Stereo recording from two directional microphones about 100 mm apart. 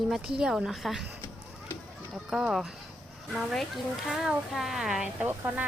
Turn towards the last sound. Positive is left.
turn(degrees=-20)  # may be behind; listen again after turning